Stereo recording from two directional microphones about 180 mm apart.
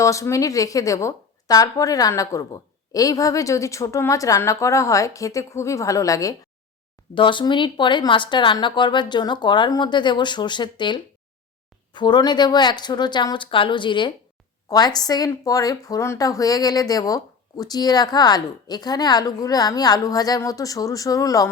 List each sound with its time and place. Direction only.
0.0 s a woman's voice: 15° left (ahead or behind)